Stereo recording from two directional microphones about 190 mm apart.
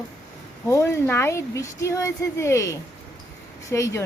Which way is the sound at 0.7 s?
15° left (ahead or behind).